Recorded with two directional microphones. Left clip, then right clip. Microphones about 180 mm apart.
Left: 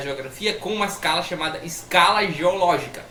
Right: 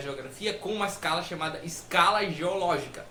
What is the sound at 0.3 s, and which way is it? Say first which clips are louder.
Speech: left 7 dB; 25° right (ahead or behind).